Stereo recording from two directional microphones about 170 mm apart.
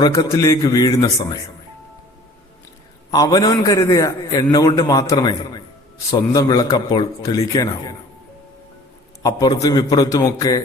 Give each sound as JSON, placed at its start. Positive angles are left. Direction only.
{"t": 0.0, "sound": "a man's voice", "side_deg": 20}
{"t": 3.1, "sound": "a man's voice", "side_deg": 25}
{"t": 9.2, "sound": "a man's voice", "side_deg": 20}